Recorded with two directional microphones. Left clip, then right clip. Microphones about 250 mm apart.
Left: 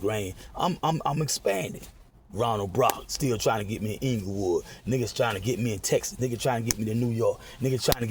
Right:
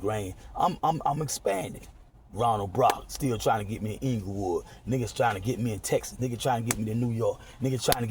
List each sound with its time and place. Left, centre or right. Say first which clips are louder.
0.0 s speech: left 2 dB; left